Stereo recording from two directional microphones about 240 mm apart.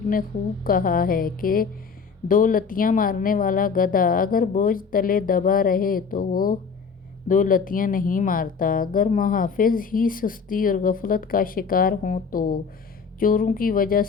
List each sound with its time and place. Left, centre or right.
0.1 s speech: left